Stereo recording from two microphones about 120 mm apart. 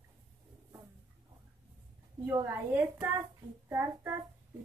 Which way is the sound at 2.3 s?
20° right (ahead or behind).